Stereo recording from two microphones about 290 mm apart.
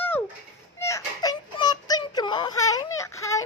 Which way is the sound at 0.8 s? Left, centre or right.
Centre.